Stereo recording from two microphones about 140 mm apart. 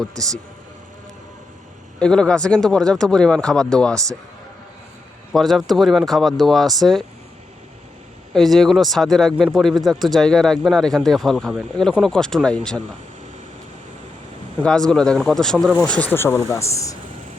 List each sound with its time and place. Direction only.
2.0 s speech: 5° left (ahead or behind)
5.3 s speech: centre (ahead or behind)
8.3 s speech: centre (ahead or behind)
14.6 s speech: 5° left (ahead or behind)
15.8 s speech: 10° left (ahead or behind)